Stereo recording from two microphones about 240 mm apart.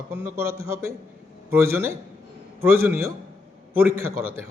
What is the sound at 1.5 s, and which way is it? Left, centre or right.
A man's voice, centre.